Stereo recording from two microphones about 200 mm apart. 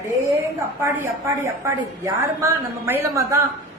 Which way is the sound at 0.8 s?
15° right (ahead or behind).